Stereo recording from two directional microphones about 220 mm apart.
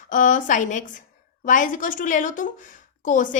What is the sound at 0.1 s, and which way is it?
A woman's voice, 35° left (ahead or behind).